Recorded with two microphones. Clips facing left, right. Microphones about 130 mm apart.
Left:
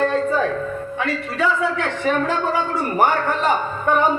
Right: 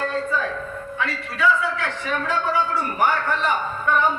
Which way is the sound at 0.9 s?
45° left (ahead or behind).